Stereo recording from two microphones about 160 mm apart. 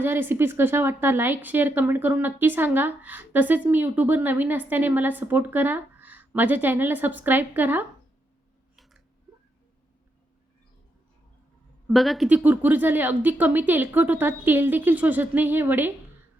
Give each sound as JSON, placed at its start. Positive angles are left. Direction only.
{"t": 0.0, "sound": "speech", "side_deg": -15}
{"t": 8.7, "sound": "a sound", "side_deg": 0}
{"t": 11.9, "sound": "a woman's voice", "side_deg": 0}